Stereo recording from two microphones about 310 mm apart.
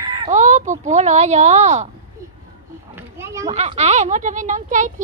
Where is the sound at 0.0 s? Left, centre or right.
Centre.